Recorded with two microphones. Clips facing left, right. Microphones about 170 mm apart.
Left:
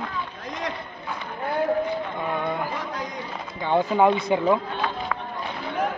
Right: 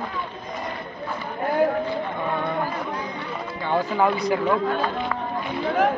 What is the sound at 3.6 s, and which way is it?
Speech, 20° left (ahead or behind).